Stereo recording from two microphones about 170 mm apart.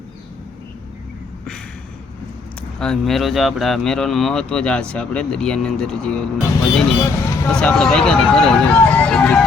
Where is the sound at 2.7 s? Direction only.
5° left (ahead or behind).